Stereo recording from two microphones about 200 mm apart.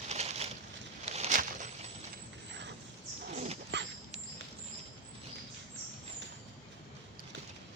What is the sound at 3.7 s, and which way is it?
Dog, 60° right (ahead or behind).